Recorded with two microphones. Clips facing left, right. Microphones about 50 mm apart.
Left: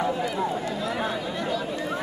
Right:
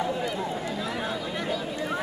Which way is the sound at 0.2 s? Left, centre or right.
Centre.